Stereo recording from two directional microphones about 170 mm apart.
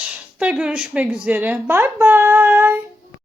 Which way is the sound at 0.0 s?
5° right (ahead or behind).